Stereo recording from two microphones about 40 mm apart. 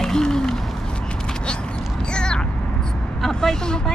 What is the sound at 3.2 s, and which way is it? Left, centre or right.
Speech, centre.